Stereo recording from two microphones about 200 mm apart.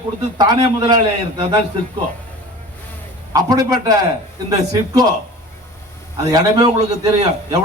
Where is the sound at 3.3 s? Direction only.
20° right (ahead or behind).